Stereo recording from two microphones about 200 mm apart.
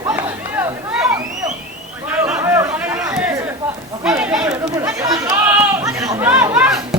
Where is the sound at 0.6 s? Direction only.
10° right (ahead or behind).